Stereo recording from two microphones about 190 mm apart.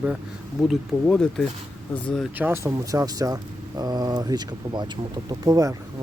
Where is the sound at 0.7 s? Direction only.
5° left (ahead or behind).